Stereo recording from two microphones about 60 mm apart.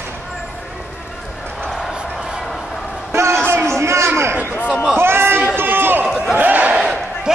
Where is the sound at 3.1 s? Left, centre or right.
Right.